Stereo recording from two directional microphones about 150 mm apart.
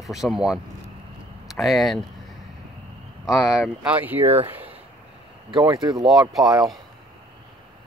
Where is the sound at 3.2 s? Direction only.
Centre (ahead or behind).